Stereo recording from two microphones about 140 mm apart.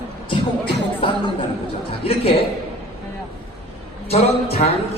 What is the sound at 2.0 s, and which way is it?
Speech, 40° left (ahead or behind).